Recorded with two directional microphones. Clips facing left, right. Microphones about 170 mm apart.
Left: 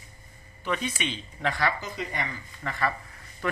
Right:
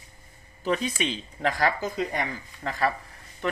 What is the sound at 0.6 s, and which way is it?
Speech, 40° right (ahead or behind).